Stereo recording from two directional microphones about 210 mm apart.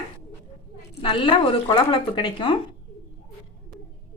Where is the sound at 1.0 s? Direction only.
25° left (ahead or behind).